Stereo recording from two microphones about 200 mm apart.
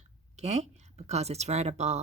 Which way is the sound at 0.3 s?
35° right (ahead or behind).